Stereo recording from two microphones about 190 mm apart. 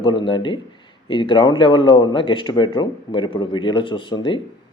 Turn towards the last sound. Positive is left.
turn(degrees=25)  # may be behind; listen again after turning